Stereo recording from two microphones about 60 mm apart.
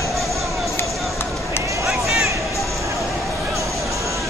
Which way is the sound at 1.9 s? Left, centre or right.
Centre.